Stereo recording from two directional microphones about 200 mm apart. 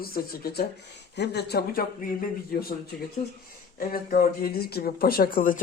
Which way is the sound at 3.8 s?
45° left (ahead or behind).